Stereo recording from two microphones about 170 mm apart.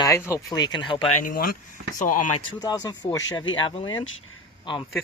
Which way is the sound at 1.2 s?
55° left (ahead or behind).